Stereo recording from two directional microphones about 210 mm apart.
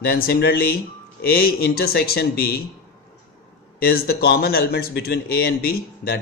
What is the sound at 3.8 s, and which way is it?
Speech, 45° left (ahead or behind).